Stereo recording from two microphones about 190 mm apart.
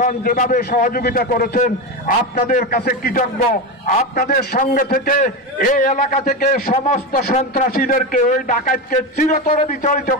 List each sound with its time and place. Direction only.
0.0 s a man's voice: 45° left (ahead or behind)
6.2 s a man's voice: 50° left (ahead or behind)